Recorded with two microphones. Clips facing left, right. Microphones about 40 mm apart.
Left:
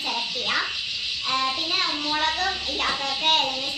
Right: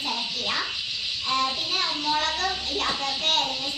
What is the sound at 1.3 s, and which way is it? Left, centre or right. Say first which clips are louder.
A child's voice: left 1 dB; centre.